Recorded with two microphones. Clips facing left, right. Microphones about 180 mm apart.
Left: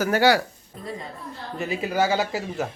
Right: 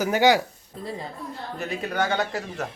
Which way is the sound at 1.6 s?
Centre (ahead or behind).